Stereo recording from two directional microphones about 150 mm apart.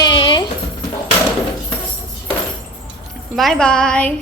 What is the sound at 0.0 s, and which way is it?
Music, 30° left (ahead or behind).